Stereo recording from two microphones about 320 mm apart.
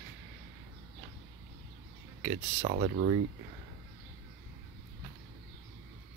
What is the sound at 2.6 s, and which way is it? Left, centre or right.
Speech, right.